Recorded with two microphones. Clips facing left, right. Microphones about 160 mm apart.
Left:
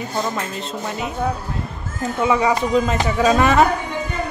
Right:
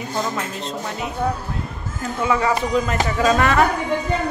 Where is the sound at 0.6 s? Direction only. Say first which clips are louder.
Left 1 dB; centre (ahead or behind).